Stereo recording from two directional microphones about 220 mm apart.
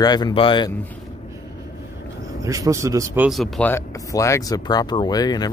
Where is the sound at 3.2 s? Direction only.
Centre (ahead or behind); by 5.5 s 15° left (ahead or behind).